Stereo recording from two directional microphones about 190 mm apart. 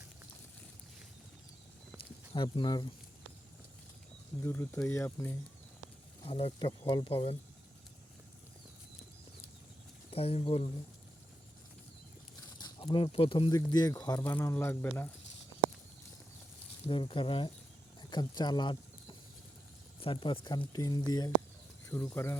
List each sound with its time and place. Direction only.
2.0 s a sound: 25° left (ahead or behind)
4.4 s speech: 10° left (ahead or behind)
6.2 s speech: 25° left (ahead or behind)
10.1 s speech: 30° left (ahead or behind)
12.5 s speech: 25° left (ahead or behind)
16.8 s speech: 25° left (ahead or behind)